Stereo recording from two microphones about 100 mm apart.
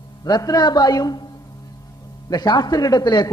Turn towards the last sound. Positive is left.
turn(degrees=45)  # may be behind; listen again after turning